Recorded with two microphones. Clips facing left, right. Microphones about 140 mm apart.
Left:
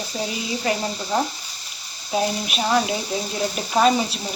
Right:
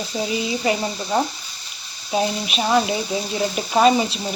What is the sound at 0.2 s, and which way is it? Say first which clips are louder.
Speech: right 4 dB; 5° right (ahead or behind).